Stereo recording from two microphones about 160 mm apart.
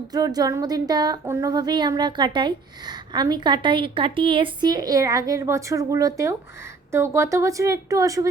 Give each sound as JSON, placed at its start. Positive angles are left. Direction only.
{"t": 0.1, "sound": "speech", "side_deg": -25}